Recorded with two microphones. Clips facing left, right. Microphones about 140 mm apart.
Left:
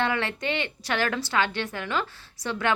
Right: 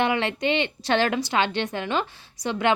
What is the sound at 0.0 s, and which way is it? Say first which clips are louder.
A woman's voice: right 4 dB; 20° right (ahead or behind).